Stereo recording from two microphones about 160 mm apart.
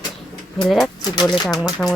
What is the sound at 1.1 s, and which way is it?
Speech, 25° left (ahead or behind).